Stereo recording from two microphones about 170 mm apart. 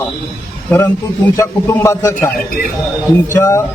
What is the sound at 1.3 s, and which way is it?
Speech, 15° left (ahead or behind).